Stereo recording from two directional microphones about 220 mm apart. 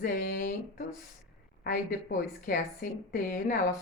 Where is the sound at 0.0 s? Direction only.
40° left (ahead or behind).